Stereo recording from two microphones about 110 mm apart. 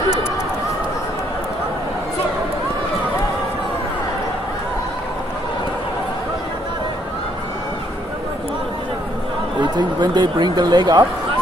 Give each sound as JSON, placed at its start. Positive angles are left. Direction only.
{"t": 9.6, "sound": "speech", "side_deg": -40}